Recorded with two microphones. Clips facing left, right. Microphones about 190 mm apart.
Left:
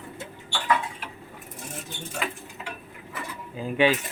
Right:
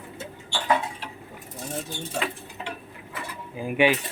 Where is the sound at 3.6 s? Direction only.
15° right (ahead or behind).